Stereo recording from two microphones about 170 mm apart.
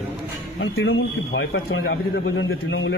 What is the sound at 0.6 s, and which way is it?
A man's voice, 90° left.